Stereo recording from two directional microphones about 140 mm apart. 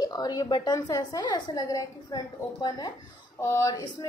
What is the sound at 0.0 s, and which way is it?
A woman's voice, 30° left (ahead or behind).